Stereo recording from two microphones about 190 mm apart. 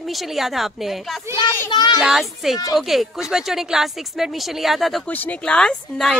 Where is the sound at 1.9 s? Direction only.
Centre (ahead or behind).